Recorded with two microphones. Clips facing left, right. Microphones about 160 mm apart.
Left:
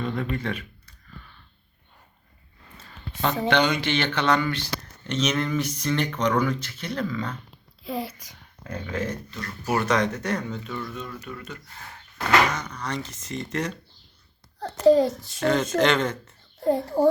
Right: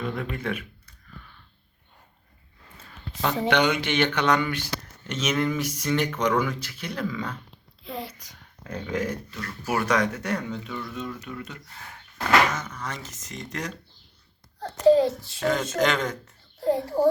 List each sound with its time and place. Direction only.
0.0 s speech: 5° right (ahead or behind)
3.2 s speech: 15° right (ahead or behind)
7.9 s a sound: 5° left (ahead or behind)
8.7 s speech: 15° right (ahead or behind)
12.1 s speech: 5° right (ahead or behind)
13.0 s speech: 45° right (ahead or behind)
13.2 s speech: centre (ahead or behind)
14.8 s a child's voice: 40° left (ahead or behind)
15.4 s speech: centre (ahead or behind)